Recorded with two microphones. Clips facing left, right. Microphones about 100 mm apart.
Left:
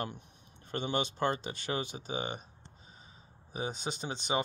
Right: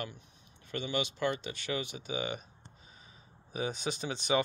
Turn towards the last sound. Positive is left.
turn(degrees=25)  # may be behind; listen again after turning